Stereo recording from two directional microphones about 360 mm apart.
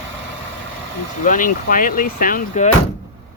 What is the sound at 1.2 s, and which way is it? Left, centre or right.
Speech, left.